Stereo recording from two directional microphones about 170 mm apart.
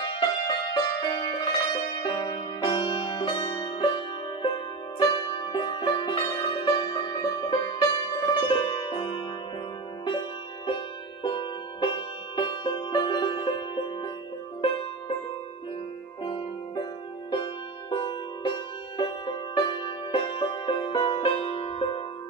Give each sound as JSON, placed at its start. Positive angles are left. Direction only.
{"t": 0.1, "sound": "music", "side_deg": 30}
{"t": 11.2, "sound": "music", "side_deg": 30}
{"t": 16.3, "sound": "music", "side_deg": 35}